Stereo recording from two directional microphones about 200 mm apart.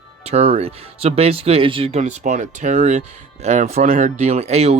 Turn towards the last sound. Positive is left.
turn(degrees=-30)  # may be behind; listen again after turning